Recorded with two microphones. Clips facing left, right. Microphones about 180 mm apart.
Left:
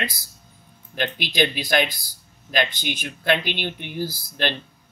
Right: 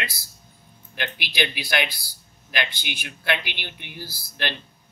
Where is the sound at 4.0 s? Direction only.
20° left (ahead or behind).